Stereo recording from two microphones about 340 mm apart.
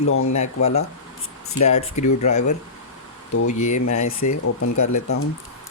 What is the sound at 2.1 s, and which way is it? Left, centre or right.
Speech, left.